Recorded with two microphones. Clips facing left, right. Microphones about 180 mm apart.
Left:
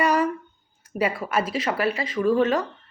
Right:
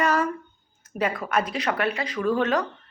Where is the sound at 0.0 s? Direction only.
15° left (ahead or behind).